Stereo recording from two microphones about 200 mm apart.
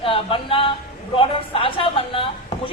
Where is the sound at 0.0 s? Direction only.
25° left (ahead or behind).